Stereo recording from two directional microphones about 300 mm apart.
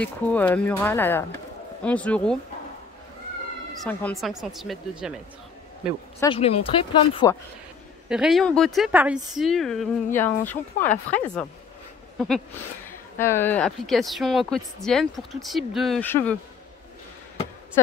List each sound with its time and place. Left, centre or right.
0.0 s speech: centre
3.9 s speech: centre
6.1 s speech: centre
8.1 s speech: centre
12.8 s speech: centre